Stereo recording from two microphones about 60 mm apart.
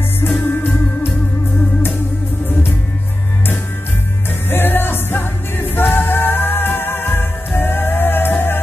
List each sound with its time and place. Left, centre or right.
4.5 s music: left